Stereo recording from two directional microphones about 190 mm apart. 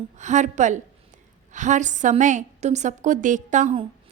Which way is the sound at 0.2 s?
40° right (ahead or behind).